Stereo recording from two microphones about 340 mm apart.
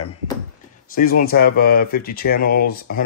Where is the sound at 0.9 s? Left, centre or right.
Left.